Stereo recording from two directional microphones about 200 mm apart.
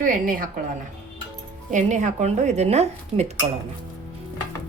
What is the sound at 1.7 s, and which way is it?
A woman's voice, 35° right (ahead or behind).